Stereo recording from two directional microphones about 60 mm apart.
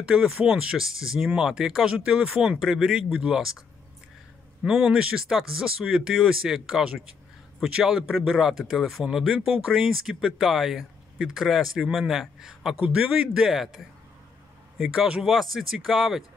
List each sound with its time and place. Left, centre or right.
0.0 s speech: centre
2.0 s speech: centre
2.6 s speech: centre
4.6 s speech: centre
13.5 s speech: centre
14.9 s speech: centre
15.2 s speech: centre